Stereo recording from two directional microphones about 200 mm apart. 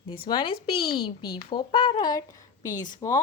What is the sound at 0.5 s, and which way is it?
Speech, 50° left (ahead or behind).